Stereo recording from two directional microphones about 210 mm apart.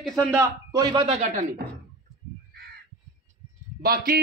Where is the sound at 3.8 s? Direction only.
45° right (ahead or behind).